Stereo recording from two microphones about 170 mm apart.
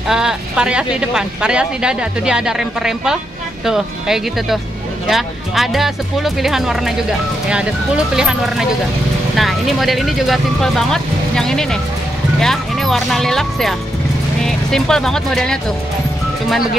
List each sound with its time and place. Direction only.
0.1 s speech: 5° right (ahead or behind)